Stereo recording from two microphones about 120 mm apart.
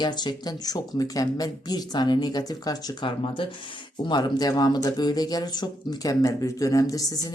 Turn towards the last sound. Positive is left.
turn(degrees=30)  # may be behind; listen again after turning